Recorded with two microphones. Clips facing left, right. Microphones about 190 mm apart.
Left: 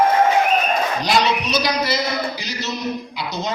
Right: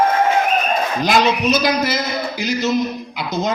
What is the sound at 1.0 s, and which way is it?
Speech, 50° right (ahead or behind).